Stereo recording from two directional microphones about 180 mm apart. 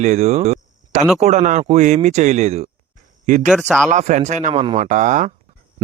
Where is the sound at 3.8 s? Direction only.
40° right (ahead or behind).